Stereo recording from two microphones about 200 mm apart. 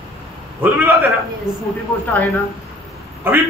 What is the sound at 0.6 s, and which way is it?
Speech, 10° right (ahead or behind).